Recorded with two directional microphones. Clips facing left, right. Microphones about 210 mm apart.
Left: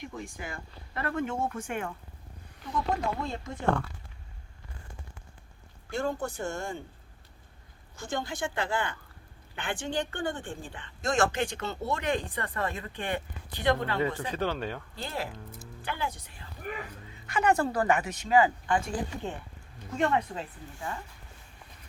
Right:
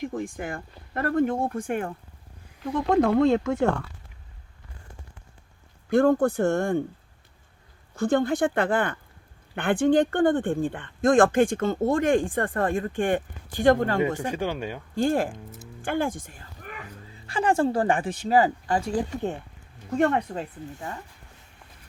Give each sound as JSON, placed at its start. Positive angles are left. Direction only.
{"t": 0.0, "sound": "speech", "side_deg": -50}
{"t": 2.9, "sound": "speech", "side_deg": -70}
{"t": 5.9, "sound": "speech", "side_deg": -60}
{"t": 7.9, "sound": "speech", "side_deg": -60}
{"t": 14.3, "sound": "speech", "side_deg": -10}
{"t": 14.9, "sound": "speech", "side_deg": -50}
{"t": 17.1, "sound": "speech", "side_deg": -30}
{"t": 20.3, "sound": "speech", "side_deg": -40}